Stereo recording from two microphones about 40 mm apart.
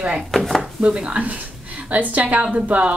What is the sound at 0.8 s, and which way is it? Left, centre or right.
A woman's voice, right.